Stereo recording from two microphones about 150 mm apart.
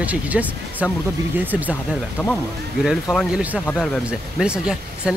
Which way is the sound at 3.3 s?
10° right (ahead or behind).